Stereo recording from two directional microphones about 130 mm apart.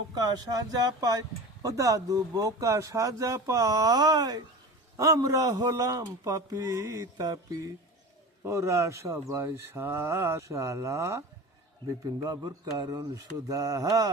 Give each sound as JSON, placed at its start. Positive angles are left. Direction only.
{"t": 0.1, "sound": "speech", "side_deg": -30}
{"t": 8.4, "sound": "a man's voice", "side_deg": -25}